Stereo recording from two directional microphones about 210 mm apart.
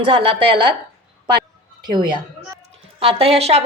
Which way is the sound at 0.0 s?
25° right (ahead or behind).